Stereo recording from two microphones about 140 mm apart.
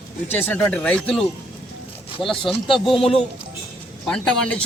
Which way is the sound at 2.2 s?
35° left (ahead or behind).